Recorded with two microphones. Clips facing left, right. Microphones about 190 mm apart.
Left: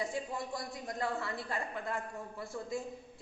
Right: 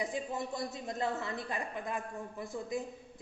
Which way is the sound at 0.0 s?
20° right (ahead or behind).